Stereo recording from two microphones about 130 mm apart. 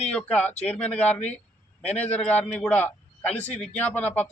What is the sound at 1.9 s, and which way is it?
Speech, 60° left (ahead or behind).